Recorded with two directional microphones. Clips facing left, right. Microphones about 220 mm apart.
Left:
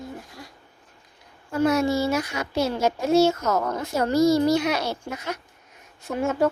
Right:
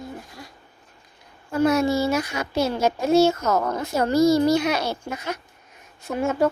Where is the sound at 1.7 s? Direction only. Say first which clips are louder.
Right 1 dB; 25° right (ahead or behind).